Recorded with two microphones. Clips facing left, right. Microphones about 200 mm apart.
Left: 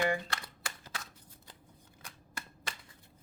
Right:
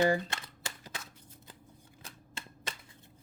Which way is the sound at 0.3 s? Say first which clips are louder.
Even; 20° right (ahead or behind).